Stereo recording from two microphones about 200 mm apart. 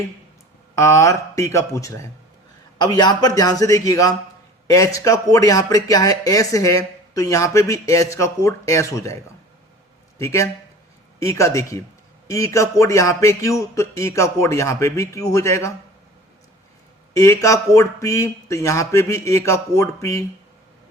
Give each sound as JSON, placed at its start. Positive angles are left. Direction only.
{"t": 0.8, "sound": "speech", "side_deg": 15}
{"t": 10.2, "sound": "speech", "side_deg": 15}
{"t": 17.2, "sound": "speech", "side_deg": 15}